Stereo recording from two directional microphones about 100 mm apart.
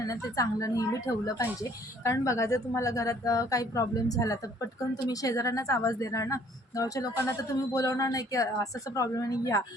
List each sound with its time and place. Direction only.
0.0 s a woman's voice: 35° left (ahead or behind)